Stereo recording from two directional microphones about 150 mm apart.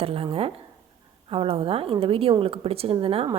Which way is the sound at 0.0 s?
40° right (ahead or behind).